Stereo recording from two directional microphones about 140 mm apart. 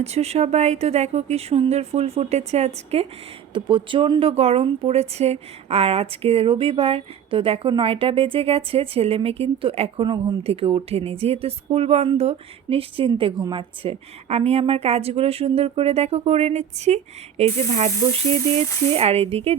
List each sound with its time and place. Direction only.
0.0 s speech: 50° right (ahead or behind)
3.5 s speech: 35° right (ahead or behind)